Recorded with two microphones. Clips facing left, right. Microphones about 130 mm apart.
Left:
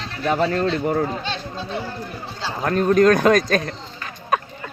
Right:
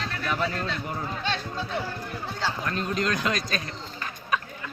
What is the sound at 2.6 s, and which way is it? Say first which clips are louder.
Speech: left 16 dB; 50° left (ahead or behind).